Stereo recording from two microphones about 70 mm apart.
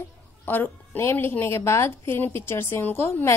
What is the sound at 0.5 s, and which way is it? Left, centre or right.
A woman's voice, left.